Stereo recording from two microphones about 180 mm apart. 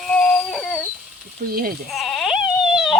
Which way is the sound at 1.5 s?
55° right (ahead or behind).